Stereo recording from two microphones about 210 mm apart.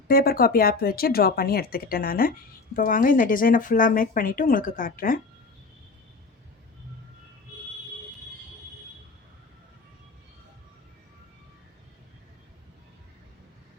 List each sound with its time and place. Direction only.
0.1 s speech: 45° left (ahead or behind)